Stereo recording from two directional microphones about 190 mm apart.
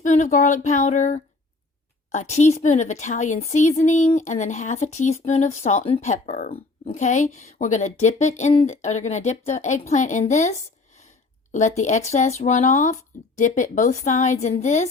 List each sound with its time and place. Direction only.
0.0 s speech: 40° left (ahead or behind)
11.8 s speech: 40° left (ahead or behind)